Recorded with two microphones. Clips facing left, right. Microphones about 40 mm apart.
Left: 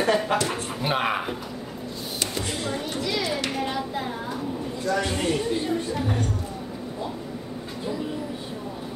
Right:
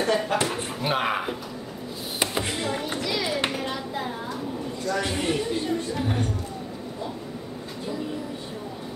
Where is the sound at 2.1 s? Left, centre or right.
Right.